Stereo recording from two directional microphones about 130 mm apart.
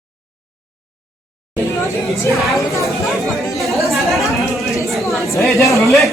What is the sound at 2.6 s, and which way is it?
Speech, 25° left (ahead or behind).